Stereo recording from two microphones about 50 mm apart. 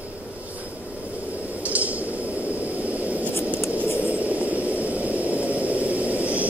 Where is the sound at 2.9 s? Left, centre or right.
Right.